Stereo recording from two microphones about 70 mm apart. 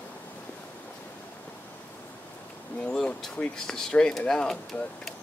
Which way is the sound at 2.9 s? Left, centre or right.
Centre.